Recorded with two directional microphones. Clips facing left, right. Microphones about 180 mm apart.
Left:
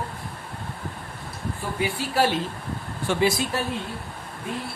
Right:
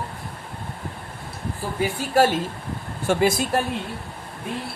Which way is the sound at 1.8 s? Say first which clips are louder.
Right 4 dB; 45° right (ahead or behind).